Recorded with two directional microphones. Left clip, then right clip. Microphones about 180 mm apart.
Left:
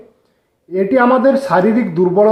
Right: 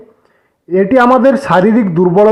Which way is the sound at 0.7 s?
25° right (ahead or behind).